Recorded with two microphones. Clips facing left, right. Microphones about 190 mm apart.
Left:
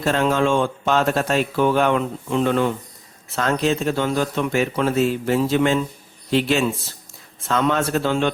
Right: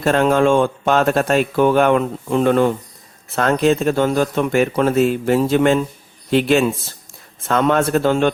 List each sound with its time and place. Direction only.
0.0 s a man's voice: 55° right (ahead or behind)